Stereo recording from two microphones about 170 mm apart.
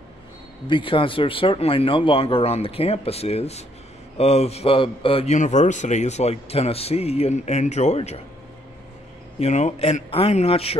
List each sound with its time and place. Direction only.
0.7 s a man's voice: 30° left (ahead or behind)
9.4 s a man's voice: 40° left (ahead or behind)